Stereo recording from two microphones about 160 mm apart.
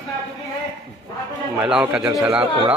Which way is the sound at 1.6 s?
5° right (ahead or behind).